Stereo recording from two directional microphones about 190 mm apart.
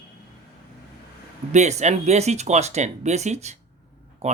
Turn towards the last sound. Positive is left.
turn(degrees=-35)  # may be behind; listen again after turning